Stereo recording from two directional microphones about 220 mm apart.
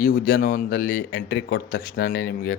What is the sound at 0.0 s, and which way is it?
Speech, 40° left (ahead or behind).